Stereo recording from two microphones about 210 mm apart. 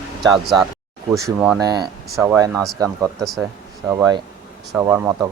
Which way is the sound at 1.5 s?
20° right (ahead or behind).